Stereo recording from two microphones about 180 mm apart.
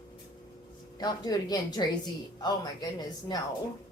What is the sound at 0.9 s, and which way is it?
Speech, 20° left (ahead or behind).